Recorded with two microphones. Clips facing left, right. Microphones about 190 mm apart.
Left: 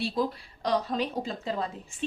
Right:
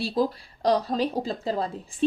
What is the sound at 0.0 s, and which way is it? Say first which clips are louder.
A woman's voice: right 4 dB; 35° right (ahead or behind).